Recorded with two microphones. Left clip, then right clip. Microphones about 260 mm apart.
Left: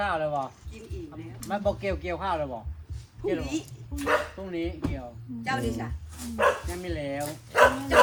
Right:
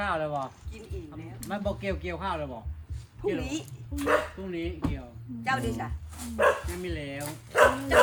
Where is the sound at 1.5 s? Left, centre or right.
Centre.